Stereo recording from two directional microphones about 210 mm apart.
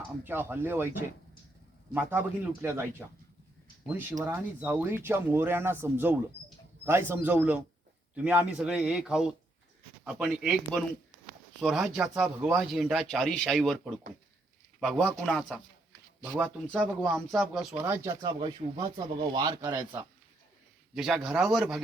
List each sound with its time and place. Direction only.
0.3 s speech: 10° right (ahead or behind)
4.2 s speech: 10° right (ahead or behind)
17.2 s speech: centre (ahead or behind)
20.9 s speech: centre (ahead or behind)